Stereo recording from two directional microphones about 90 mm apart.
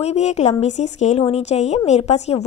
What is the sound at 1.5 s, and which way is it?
Speech, 90° left.